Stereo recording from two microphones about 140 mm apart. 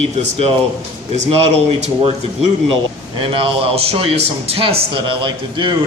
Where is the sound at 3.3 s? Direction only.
40° right (ahead or behind).